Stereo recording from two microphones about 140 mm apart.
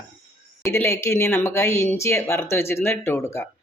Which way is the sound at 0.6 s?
20° left (ahead or behind).